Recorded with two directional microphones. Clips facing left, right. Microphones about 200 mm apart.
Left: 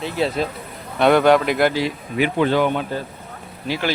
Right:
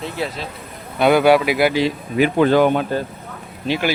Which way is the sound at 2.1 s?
45° right (ahead or behind).